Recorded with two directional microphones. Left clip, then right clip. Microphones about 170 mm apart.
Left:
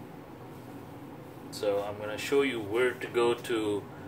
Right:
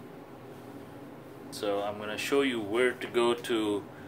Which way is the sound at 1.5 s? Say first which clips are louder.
Left 1 dB; 40° right (ahead or behind).